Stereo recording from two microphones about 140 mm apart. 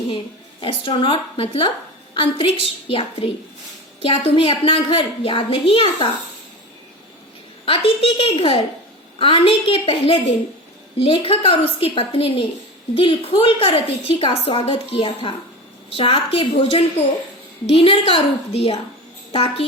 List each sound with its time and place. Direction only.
0.6 s a woman's voice: 40° left (ahead or behind)
7.6 s a woman's voice: 40° left (ahead or behind)